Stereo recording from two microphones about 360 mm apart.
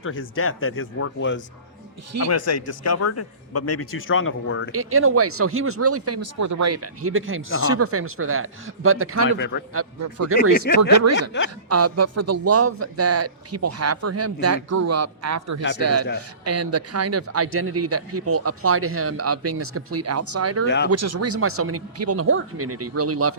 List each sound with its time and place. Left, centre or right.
0.0 s speech: left
2.3 s speech: left
4.7 s speech: right
9.4 s speech: left
9.7 s a man's voice: right
11.2 s speech: left
11.7 s a man's voice: right
20.7 s speech: left
20.9 s speech: right